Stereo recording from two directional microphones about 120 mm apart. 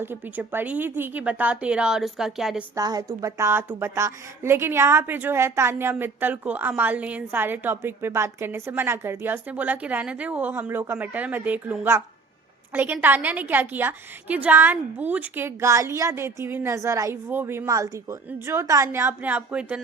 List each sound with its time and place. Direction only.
0.0 s a woman's voice: 20° right (ahead or behind)
2.7 s a woman's voice: 30° right (ahead or behind); by 19.8 s 10° right (ahead or behind)